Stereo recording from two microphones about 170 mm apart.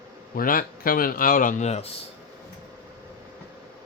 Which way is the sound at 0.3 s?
55° left (ahead or behind).